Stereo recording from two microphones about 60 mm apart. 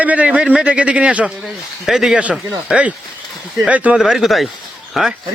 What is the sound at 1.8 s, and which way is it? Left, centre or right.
Speech, centre.